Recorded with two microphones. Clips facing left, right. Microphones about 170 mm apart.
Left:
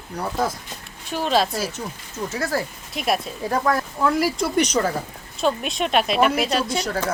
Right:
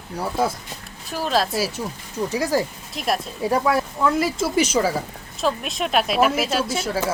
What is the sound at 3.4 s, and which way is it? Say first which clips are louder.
A woman's voice: right 2 dB; 10° right (ahead or behind).